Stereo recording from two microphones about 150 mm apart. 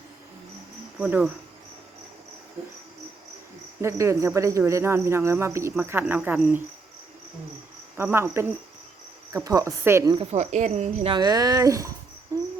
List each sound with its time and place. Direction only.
0.9 s speech: 5° right (ahead or behind)
3.8 s speech: 20° right (ahead or behind)
7.9 s a woman's voice: 15° right (ahead or behind)
10.2 s speech: 50° right (ahead or behind)
11.1 s a woman's voice: 25° right (ahead or behind)
12.3 s cricket: 20° right (ahead or behind)